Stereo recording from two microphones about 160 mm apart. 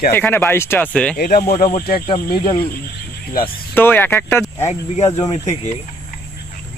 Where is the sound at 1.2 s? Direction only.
65° left (ahead or behind).